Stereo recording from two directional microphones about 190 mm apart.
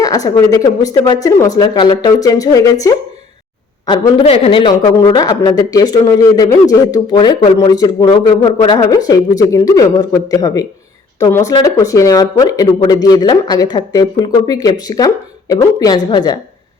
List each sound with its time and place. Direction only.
0.0 s a man's voice: 20° left (ahead or behind)
3.8 s a man's voice: 30° left (ahead or behind)